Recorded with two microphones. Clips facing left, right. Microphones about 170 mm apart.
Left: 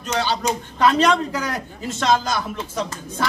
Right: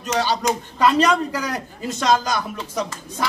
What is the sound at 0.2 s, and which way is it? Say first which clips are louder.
Speech: right 1 dB; 10° right (ahead or behind).